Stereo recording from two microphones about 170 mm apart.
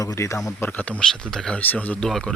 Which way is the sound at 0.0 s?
20° left (ahead or behind).